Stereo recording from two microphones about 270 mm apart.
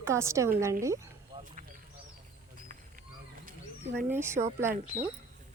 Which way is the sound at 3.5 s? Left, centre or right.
Right.